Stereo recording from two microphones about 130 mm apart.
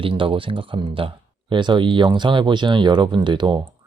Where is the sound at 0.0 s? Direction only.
40° right (ahead or behind).